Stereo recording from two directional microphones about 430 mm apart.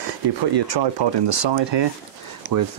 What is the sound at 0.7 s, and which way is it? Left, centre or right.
Speech, right.